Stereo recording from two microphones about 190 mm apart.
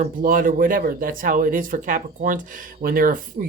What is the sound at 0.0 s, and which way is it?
Speech, 45° right (ahead or behind).